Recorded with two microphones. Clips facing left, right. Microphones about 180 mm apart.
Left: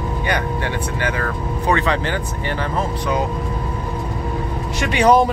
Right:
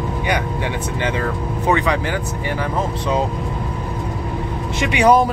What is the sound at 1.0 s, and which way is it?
Speech, 20° right (ahead or behind).